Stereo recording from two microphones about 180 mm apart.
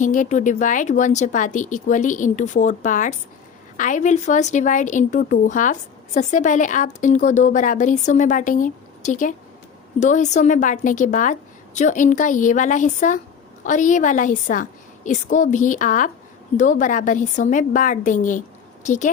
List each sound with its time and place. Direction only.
0.0 s speech: 45° left (ahead or behind)